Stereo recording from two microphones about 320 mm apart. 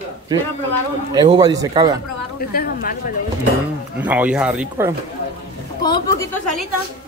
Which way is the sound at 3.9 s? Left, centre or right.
Centre.